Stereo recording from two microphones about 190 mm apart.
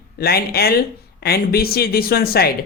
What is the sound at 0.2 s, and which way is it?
Speech, 55° left (ahead or behind).